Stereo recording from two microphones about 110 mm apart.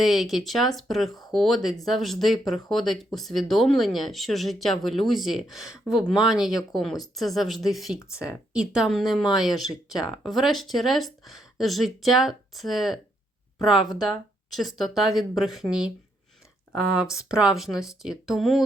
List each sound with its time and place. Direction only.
0.0 s speech: centre (ahead or behind)
13.8 s speech: 35° left (ahead or behind)
14.1 s speech: centre (ahead or behind)
16.7 s speech: 5° right (ahead or behind)